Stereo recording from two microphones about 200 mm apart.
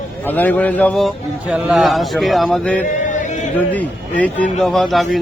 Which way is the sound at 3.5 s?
10° left (ahead or behind).